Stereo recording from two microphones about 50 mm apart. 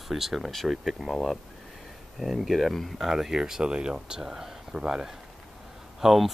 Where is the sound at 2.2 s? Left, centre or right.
Centre.